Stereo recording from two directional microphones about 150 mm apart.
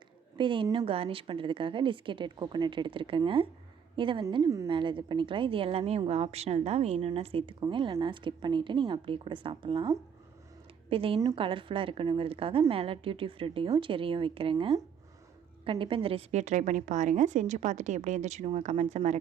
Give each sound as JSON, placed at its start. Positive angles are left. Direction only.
{"t": 0.3, "sound": "a woman's voice", "side_deg": -35}
{"t": 10.8, "sound": "a woman's voice", "side_deg": -40}